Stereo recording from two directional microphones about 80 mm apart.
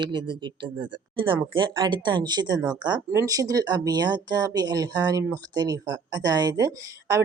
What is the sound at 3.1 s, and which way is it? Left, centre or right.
Speech, right.